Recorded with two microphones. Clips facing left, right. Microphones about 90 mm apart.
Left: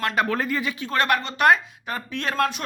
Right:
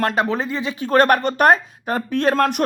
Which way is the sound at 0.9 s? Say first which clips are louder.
Right 8 dB; 45° right (ahead or behind).